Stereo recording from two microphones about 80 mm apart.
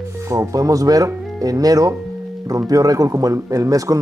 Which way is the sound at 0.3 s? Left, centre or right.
Right.